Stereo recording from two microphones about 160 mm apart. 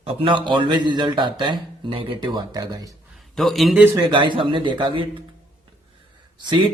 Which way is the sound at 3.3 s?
Centre (ahead or behind).